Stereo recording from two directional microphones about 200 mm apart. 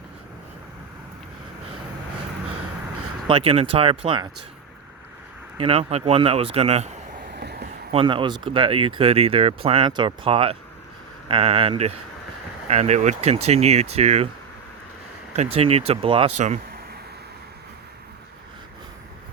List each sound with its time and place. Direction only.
3.2 s speech: 30° right (ahead or behind)
5.5 s speech: 30° right (ahead or behind)
7.3 s a sound: 55° right (ahead or behind)
7.9 s speech: 25° right (ahead or behind)
15.4 s speech: 30° right (ahead or behind)